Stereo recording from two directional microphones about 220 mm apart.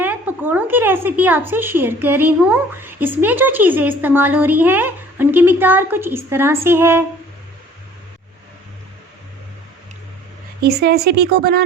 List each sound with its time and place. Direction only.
0.0 s speech: 10° right (ahead or behind)
10.6 s speech: 45° right (ahead or behind)